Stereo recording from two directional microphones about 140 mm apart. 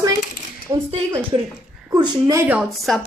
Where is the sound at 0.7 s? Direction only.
30° right (ahead or behind).